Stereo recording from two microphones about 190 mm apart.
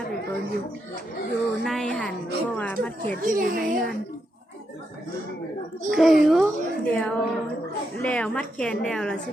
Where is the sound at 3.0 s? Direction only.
45° right (ahead or behind).